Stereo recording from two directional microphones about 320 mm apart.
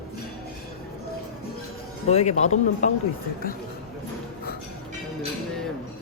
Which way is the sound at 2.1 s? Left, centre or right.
Centre.